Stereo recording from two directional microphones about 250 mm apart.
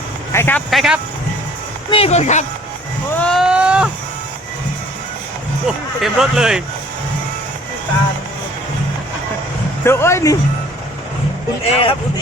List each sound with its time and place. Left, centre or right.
0.3 s speech: centre
1.9 s speech: left
3.2 s a sound: centre
5.6 s speech: centre
9.8 s speech: centre
11.6 s speech: left